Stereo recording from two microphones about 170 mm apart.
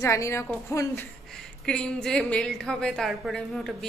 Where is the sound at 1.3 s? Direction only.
5° left (ahead or behind).